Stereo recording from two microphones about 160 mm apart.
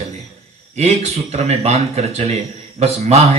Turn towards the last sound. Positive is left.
turn(degrees=-40)  # may be behind; listen again after turning